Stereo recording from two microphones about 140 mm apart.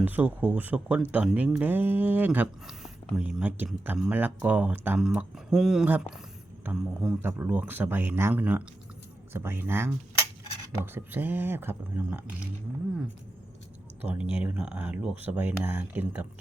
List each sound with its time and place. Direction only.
0.0 s speech: 10° right (ahead or behind)
2.6 s speech: centre (ahead or behind)
7.2 s speech: 15° right (ahead or behind)
10.9 s speech: 15° right (ahead or behind)
14.0 s speech: 10° right (ahead or behind)